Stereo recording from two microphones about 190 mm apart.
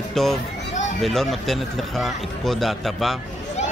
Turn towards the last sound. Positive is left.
turn(degrees=0)  # may be behind; listen again after turning